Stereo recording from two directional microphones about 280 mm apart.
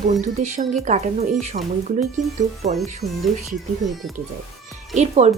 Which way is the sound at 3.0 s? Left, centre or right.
Right.